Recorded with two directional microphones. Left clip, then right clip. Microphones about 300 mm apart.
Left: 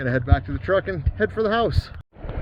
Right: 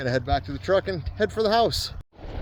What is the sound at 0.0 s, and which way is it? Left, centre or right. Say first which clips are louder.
Speech: even; centre.